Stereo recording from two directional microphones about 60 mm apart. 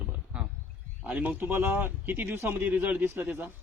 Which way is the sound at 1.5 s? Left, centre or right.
Right.